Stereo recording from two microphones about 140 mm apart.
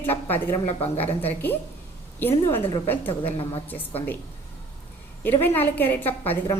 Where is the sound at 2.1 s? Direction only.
15° left (ahead or behind).